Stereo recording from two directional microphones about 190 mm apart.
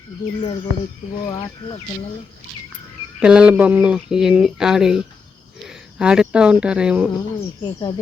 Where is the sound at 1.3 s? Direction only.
20° left (ahead or behind).